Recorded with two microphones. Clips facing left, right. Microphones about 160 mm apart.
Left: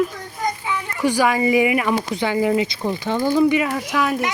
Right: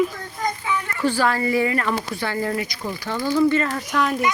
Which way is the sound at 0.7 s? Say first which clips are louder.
Left 1 dB; 15° left (ahead or behind).